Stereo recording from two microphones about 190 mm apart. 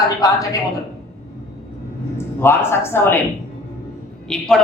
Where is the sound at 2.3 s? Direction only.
10° left (ahead or behind).